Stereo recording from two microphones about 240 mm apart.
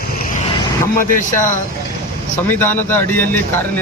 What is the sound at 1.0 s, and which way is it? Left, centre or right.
Speech, left.